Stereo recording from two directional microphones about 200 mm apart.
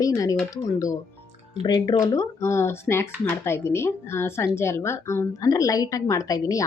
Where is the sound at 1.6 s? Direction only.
20° left (ahead or behind).